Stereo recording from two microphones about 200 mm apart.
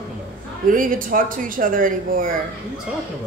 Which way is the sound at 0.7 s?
45° right (ahead or behind).